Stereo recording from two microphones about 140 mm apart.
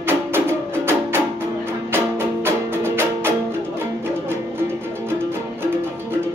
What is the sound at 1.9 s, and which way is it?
Music, 15° right (ahead or behind).